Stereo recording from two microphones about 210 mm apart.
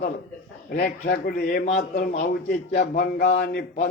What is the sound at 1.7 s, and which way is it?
Speech, 35° left (ahead or behind).